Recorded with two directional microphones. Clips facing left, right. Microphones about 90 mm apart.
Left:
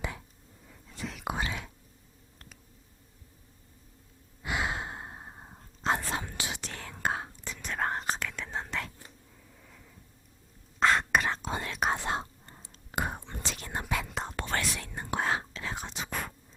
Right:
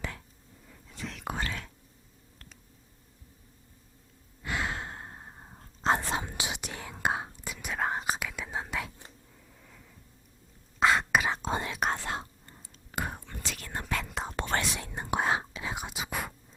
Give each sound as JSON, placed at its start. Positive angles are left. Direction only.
{"t": 0.7, "sound": "whispering", "side_deg": 5}
{"t": 4.4, "sound": "breathing", "side_deg": 15}
{"t": 5.8, "sound": "whispering", "side_deg": -30}
{"t": 6.1, "sound": "whispering", "side_deg": -20}
{"t": 9.5, "sound": "a sound", "side_deg": 0}
{"t": 10.8, "sound": "whispering", "side_deg": -5}
{"t": 11.4, "sound": "whispering", "side_deg": -25}
{"t": 11.7, "sound": "whispering", "side_deg": 0}
{"t": 11.9, "sound": "whispering", "side_deg": 25}
{"t": 13.9, "sound": "whispering", "side_deg": 0}
{"t": 14.5, "sound": "whispering", "side_deg": -20}